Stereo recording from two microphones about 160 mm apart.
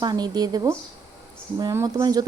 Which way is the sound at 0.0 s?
25° right (ahead or behind).